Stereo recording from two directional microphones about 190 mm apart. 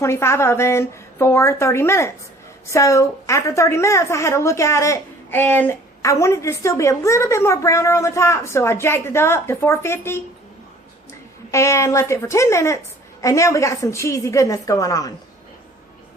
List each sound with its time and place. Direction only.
0.0 s a woman's voice: 15° left (ahead or behind)
11.5 s a woman's voice: 15° left (ahead or behind)